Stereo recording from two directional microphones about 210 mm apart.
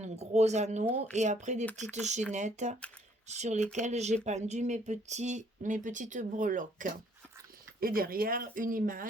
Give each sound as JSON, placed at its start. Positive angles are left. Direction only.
{"t": 0.0, "sound": "speech", "side_deg": -30}